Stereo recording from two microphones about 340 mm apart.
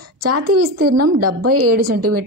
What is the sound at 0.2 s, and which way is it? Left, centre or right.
A woman's voice, right.